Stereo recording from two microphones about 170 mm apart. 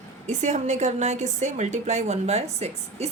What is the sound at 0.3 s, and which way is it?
A woman's voice, 45° right (ahead or behind).